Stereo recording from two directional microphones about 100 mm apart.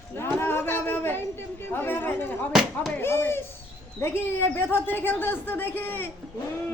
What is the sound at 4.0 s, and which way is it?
Speech, 25° left (ahead or behind).